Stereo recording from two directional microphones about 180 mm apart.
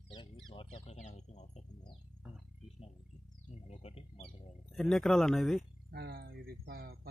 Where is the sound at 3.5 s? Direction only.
35° left (ahead or behind).